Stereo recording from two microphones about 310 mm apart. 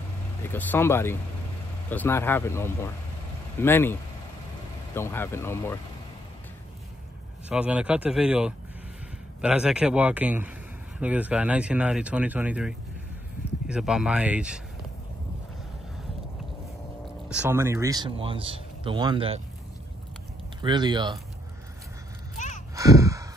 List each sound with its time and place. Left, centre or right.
0.5 s speech: centre
7.4 s speech: centre
17.3 s a man's voice: centre
20.6 s a man's voice: centre
22.8 s crow: centre